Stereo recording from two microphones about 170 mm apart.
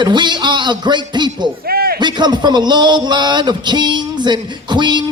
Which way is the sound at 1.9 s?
25° right (ahead or behind).